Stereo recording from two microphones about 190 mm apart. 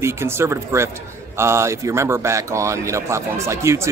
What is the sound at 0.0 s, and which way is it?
A man's voice, 15° right (ahead or behind).